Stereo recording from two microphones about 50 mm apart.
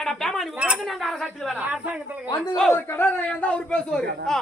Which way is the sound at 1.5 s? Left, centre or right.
Right.